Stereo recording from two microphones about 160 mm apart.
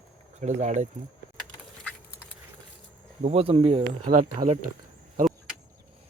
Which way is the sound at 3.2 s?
40° right (ahead or behind).